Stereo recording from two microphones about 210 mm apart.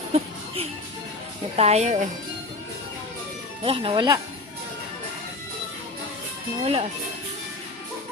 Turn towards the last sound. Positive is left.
turn(degrees=-30)  # may be behind; listen again after turning